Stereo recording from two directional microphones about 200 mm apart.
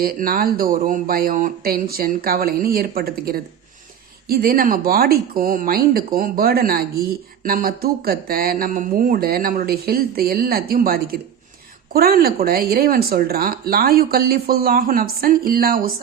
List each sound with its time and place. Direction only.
0.0 s speech: 45° right (ahead or behind)